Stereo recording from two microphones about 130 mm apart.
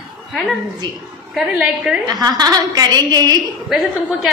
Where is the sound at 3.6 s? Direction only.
Centre (ahead or behind).